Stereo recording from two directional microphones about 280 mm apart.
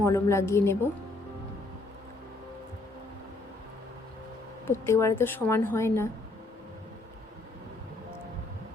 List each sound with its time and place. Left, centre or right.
0.0 s a woman's voice: centre
4.7 s a woman's voice: centre